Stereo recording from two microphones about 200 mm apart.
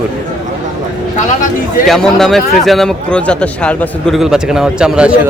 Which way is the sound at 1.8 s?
Centre (ahead or behind).